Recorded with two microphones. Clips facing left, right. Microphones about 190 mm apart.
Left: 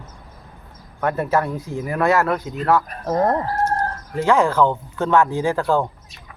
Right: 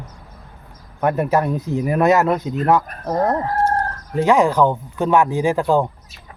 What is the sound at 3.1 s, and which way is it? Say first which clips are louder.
Speech: even; centre (ahead or behind).